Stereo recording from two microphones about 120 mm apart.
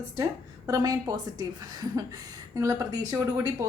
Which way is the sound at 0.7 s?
35° right (ahead or behind).